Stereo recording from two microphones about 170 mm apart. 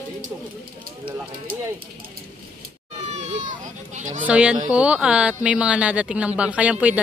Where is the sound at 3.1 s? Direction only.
40° right (ahead or behind).